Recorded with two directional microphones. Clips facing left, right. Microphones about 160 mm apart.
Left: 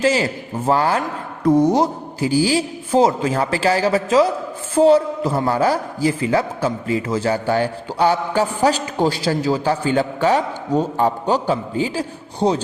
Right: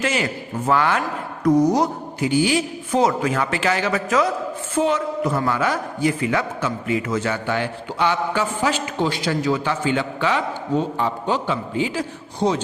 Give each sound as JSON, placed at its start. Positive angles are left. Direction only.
{"t": 0.0, "sound": "a man's voice", "side_deg": 30}